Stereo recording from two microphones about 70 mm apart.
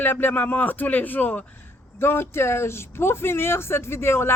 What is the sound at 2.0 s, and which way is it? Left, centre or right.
Speech, left.